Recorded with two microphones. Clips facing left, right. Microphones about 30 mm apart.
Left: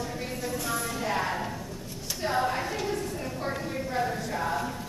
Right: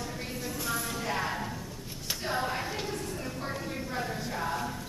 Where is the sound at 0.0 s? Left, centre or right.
Centre.